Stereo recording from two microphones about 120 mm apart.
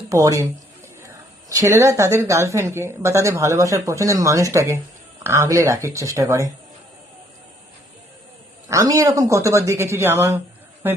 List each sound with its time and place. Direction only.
0.1 s a woman's voice: 25° right (ahead or behind)
8.7 s a woman's voice: 25° right (ahead or behind)